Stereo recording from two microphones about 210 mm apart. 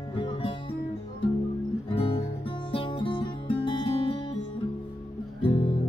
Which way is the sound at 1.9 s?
25° left (ahead or behind).